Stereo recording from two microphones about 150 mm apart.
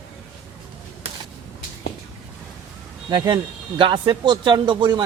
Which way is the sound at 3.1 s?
25° right (ahead or behind).